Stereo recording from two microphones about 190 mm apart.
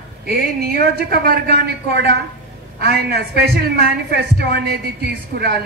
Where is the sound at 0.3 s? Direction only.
50° right (ahead or behind).